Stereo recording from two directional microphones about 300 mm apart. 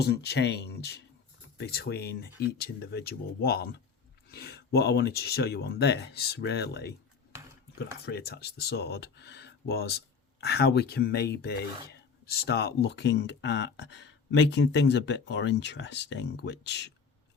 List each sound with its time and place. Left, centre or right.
0.0 s speech: left
8.0 s speech: left